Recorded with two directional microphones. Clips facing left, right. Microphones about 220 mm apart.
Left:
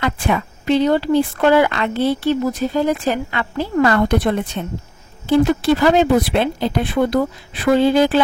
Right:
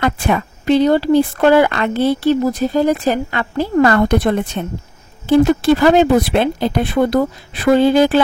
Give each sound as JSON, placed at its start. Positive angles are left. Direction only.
{"t": 0.0, "sound": "speech", "side_deg": -45}